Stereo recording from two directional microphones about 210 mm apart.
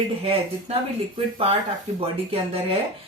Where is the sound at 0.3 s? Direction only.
25° right (ahead or behind).